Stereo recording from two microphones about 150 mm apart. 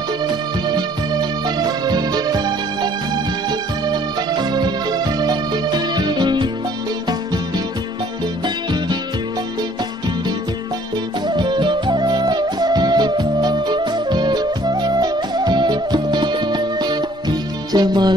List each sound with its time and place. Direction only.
0.7 s music: 25° right (ahead or behind)
3.9 s music: 30° right (ahead or behind)
11.2 s music: 30° right (ahead or behind)